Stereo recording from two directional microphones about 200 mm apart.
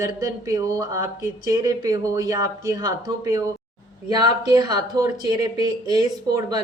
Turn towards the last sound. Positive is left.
turn(degrees=-20)  # may be behind; listen again after turning